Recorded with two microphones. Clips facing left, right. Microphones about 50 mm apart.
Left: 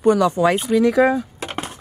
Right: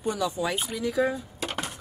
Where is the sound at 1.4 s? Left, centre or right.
Left.